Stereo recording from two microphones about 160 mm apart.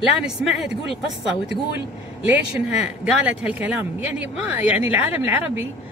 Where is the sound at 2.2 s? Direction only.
10° right (ahead or behind).